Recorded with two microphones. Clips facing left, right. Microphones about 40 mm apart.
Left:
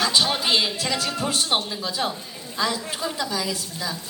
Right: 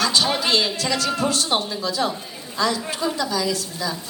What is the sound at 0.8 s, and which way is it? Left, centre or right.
A woman's voice, centre.